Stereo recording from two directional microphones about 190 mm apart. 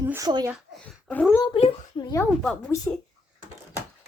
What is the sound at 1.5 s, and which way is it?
Speech, 20° left (ahead or behind).